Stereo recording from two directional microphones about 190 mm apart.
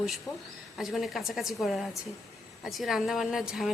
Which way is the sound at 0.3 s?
20° left (ahead or behind).